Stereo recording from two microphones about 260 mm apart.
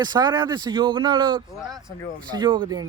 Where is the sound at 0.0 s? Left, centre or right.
Centre.